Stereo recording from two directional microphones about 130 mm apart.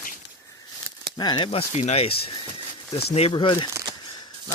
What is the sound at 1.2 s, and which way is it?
Speech, 35° left (ahead or behind).